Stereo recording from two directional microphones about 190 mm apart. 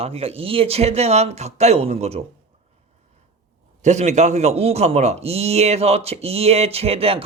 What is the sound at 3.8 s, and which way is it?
Speech, 35° right (ahead or behind).